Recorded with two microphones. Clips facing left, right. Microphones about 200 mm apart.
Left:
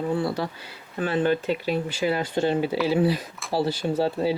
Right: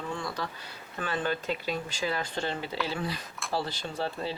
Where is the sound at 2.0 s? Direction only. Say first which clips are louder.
Left 8 dB; 15° left (ahead or behind).